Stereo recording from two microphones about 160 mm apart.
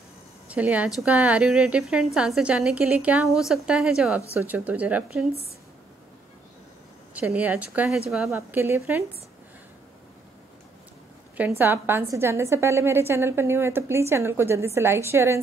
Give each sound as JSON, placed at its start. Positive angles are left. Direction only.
{"t": 0.5, "sound": "a woman's voice", "side_deg": -10}
{"t": 7.2, "sound": "a woman's voice", "side_deg": -10}
{"t": 11.3, "sound": "a woman's voice", "side_deg": -10}